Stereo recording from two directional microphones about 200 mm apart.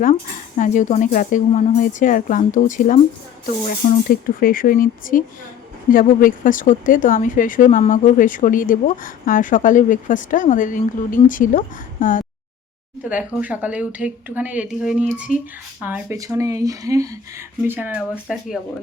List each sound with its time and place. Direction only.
0.0 s speech: 40° left (ahead or behind)
13.1 s speech: 5° right (ahead or behind)